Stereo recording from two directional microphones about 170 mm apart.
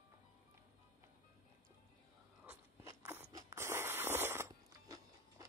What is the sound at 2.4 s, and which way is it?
Biting, 15° right (ahead or behind).